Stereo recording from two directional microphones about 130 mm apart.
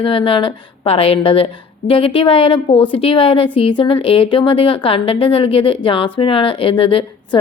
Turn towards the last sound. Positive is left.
turn(degrees=40)  # may be behind; listen again after turning